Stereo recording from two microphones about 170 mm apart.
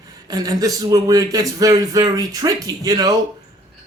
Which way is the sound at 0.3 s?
20° right (ahead or behind).